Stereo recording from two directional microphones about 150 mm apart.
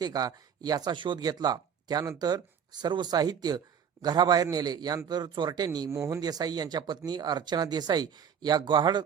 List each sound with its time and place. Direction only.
0.0 s a man's voice: 25° right (ahead or behind)